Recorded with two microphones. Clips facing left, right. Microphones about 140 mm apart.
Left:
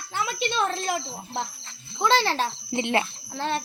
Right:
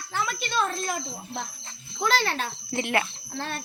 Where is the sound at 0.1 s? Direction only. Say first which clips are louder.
Left 1 dB; 25° left (ahead or behind).